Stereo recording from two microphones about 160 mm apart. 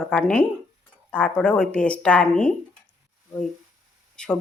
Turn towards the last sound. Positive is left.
turn(degrees=5)  # may be behind; listen again after turning